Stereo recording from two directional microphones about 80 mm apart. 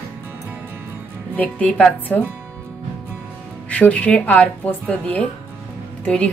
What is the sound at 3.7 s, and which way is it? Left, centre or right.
A woman's voice, centre.